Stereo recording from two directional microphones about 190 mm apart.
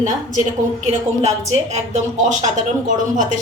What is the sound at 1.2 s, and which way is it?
A woman's voice, 35° right (ahead or behind).